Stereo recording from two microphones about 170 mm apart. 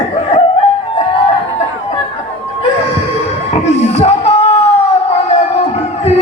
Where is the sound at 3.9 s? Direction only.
40° left (ahead or behind).